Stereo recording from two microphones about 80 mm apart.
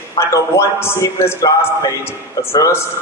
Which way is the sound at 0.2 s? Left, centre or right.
Left.